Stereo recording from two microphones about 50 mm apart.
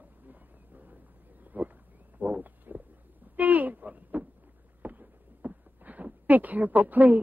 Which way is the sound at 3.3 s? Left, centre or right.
Right.